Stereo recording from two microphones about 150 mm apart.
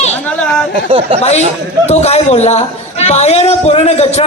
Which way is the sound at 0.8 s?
35° right (ahead or behind).